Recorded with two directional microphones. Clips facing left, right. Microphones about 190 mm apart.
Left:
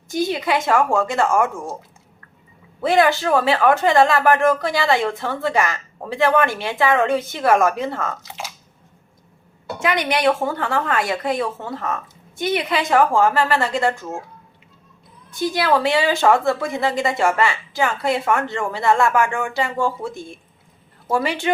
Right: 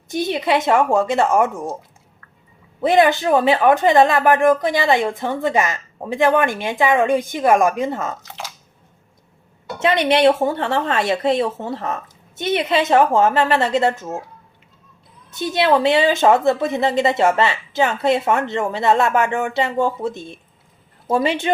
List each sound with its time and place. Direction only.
0.1 s a woman's voice: 25° right (ahead or behind)
2.8 s speech: 20° right (ahead or behind)
9.8 s a woman's voice: 25° right (ahead or behind)
15.3 s a woman's voice: 25° right (ahead or behind)